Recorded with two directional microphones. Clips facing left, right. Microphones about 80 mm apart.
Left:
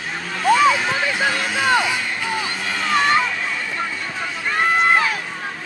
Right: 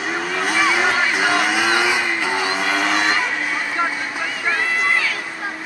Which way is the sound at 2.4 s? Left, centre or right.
Right.